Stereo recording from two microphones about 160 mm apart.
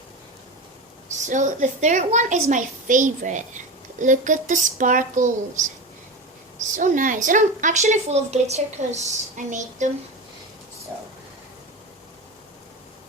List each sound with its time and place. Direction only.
1.2 s a woman's voice: 50° right (ahead or behind)
6.7 s a woman's voice: 55° right (ahead or behind)